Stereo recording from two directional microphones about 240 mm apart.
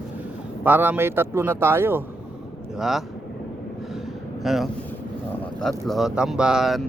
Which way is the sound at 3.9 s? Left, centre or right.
Centre.